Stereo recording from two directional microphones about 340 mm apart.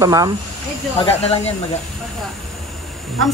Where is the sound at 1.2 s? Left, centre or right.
Centre.